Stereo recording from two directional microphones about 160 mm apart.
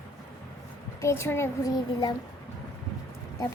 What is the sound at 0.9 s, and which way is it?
Speech, 15° left (ahead or behind).